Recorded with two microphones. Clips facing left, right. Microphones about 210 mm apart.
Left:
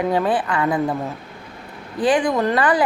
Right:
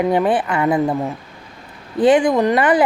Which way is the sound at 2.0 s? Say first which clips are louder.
Right 5 dB; 25° right (ahead or behind).